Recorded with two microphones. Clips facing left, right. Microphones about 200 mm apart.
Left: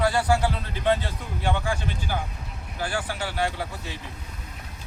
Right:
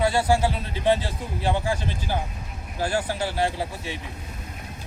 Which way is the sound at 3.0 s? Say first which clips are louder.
Right 4 dB; 40° right (ahead or behind).